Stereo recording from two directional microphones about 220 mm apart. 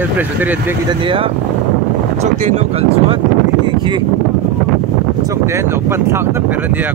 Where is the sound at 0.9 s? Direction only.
25° right (ahead or behind).